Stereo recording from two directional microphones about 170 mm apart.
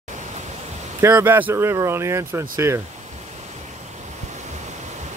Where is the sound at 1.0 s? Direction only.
10° right (ahead or behind).